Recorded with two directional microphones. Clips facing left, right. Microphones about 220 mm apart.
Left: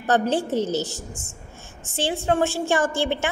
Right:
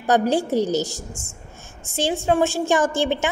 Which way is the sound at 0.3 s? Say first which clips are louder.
Right 3 dB; 10° right (ahead or behind).